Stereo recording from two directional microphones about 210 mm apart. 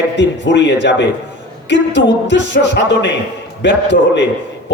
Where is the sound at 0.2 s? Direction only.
55° left (ahead or behind).